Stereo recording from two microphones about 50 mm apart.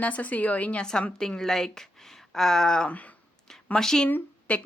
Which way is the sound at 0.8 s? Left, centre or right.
Centre.